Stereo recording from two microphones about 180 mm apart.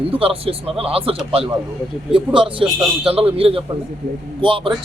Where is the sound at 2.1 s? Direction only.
30° right (ahead or behind).